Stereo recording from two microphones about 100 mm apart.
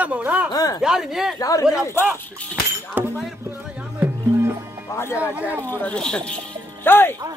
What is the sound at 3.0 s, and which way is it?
Speech, 20° right (ahead or behind).